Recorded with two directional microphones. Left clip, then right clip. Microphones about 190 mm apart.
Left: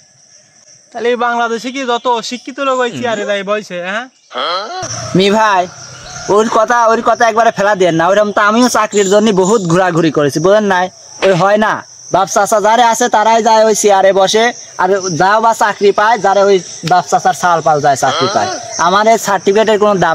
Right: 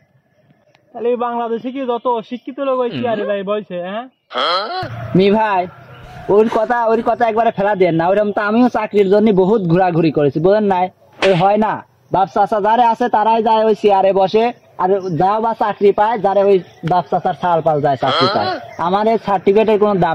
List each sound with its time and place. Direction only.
1.0 s speech: 20° left (ahead or behind); by 4.8 s centre (ahead or behind)
5.1 s speech: 15° left (ahead or behind)
11.1 s speech: centre (ahead or behind)
11.4 s speech: 20° left (ahead or behind)